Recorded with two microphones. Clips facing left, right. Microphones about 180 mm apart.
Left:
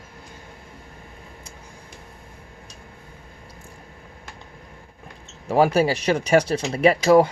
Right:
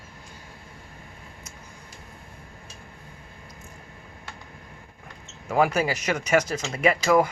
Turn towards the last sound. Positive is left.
turn(degrees=30)  # may be behind; listen again after turning